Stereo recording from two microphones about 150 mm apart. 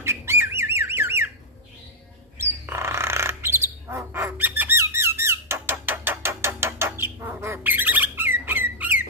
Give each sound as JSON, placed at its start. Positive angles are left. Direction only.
{"t": 0.0, "sound": "bird", "side_deg": -15}
{"t": 2.3, "sound": "bird", "side_deg": -15}